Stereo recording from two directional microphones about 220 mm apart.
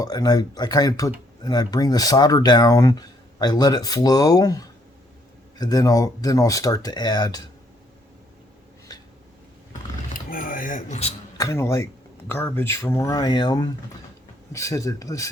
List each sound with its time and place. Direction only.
0.0 s speech: 15° left (ahead or behind)
10.2 s a sound: 40° left (ahead or behind)
11.3 s speech: 15° left (ahead or behind)